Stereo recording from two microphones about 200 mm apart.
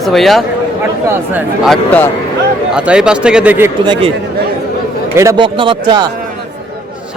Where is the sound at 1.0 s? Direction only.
10° right (ahead or behind).